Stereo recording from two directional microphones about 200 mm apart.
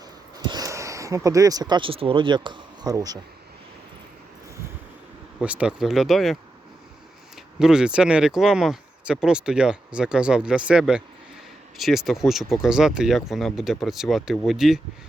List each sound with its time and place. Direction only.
0.3 s speech: 20° right (ahead or behind)
5.4 s speech: 5° right (ahead or behind)
7.6 s speech: 5° right (ahead or behind)